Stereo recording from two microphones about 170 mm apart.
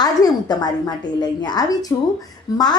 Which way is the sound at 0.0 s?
25° left (ahead or behind).